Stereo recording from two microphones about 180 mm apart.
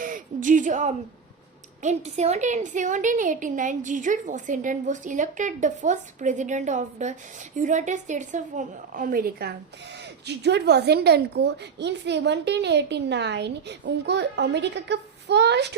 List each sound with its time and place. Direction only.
0.0 s a sound: 45° right (ahead or behind)
1.8 s a woman's voice: 40° right (ahead or behind); by 9.6 s 60° right (ahead or behind)
10.2 s a woman's voice: 70° right (ahead or behind)